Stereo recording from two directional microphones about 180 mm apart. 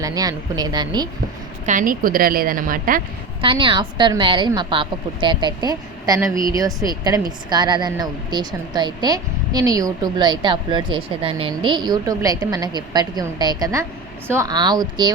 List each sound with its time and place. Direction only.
0.0 s a woman's voice: 20° right (ahead or behind)
1.6 s a woman's voice: 50° right (ahead or behind)
3.4 s a woman's voice: 30° right (ahead or behind)